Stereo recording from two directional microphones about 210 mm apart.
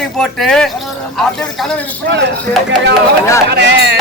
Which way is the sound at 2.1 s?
55° right (ahead or behind).